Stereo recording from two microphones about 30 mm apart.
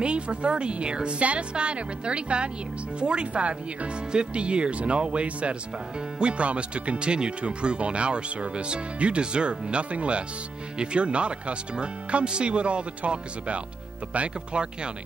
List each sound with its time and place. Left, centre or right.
0.0 s speech: right